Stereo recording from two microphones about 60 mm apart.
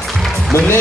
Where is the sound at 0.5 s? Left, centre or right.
Left.